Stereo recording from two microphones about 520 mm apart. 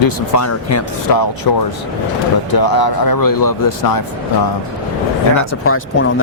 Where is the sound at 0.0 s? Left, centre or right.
Left.